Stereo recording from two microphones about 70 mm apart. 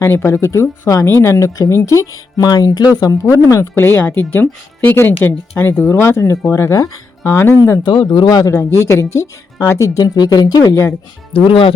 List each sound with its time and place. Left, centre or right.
0.0 s speech: left
2.4 s speech: left
3.1 s speech: left
3.8 s speech: left
4.0 s speech: left
7.3 s speech: left
7.9 s speech: left
8.4 s speech: left
10.0 s speech: left